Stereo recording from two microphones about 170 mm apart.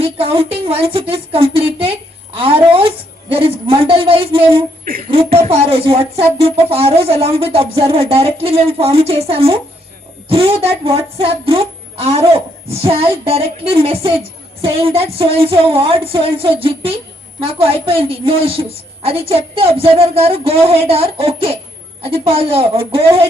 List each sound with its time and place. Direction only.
0.0 s speech: 35° right (ahead or behind)